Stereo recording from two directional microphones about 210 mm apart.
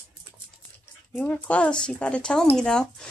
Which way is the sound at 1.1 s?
10° left (ahead or behind).